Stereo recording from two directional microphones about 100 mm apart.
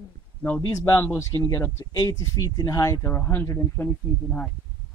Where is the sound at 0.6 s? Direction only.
30° left (ahead or behind).